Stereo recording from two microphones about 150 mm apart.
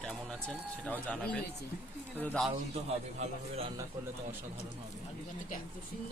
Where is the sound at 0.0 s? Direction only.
5° left (ahead or behind).